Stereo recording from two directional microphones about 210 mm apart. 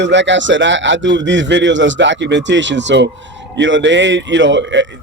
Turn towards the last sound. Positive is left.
turn(degrees=-60)  # may be behind; listen again after turning